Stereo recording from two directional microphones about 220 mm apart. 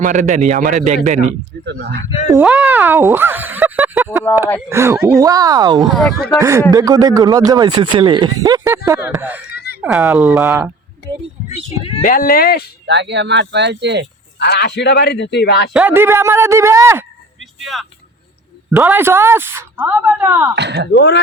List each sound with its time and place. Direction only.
0.0 s a man's voice: 35° right (ahead or behind)
1.6 s speech: 50° right (ahead or behind)
2.4 s speech: 5° right (ahead or behind)
5.9 s speech: centre (ahead or behind)
6.4 s speech: 15° right (ahead or behind)
12.0 s speech: 40° left (ahead or behind)
12.8 s speech: 50° right (ahead or behind)
14.3 s speech: 50° left (ahead or behind)
15.7 s speech: 10° right (ahead or behind)
17.6 s speech: centre (ahead or behind)
20.6 s speech: 50° right (ahead or behind)
20.9 s speech: 50° left (ahead or behind)